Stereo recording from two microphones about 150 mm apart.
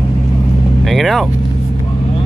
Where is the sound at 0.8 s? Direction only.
Centre (ahead or behind).